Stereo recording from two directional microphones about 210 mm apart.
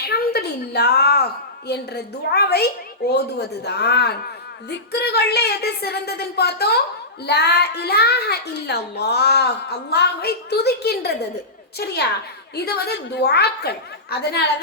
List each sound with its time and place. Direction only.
0.0 s a woman's voice: 50° left (ahead or behind)